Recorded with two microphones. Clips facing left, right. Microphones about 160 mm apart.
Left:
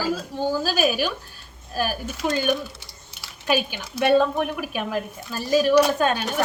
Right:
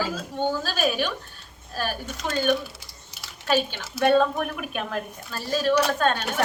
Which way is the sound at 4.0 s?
5° left (ahead or behind).